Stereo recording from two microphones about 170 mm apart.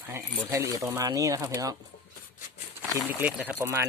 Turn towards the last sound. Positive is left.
turn(degrees=-15)  # may be behind; listen again after turning